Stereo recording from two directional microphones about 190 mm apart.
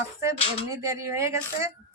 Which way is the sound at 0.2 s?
15° right (ahead or behind).